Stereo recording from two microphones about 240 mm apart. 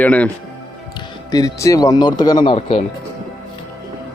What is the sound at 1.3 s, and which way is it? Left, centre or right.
A man's voice, centre.